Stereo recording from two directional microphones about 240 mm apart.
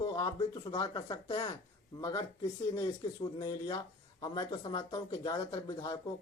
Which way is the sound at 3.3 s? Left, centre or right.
Centre.